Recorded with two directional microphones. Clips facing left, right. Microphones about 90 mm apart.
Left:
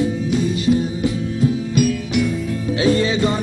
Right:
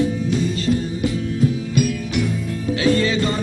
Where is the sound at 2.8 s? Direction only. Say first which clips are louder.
Left 1 dB; 20° left (ahead or behind).